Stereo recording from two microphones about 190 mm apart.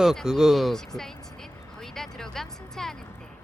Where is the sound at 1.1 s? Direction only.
20° left (ahead or behind).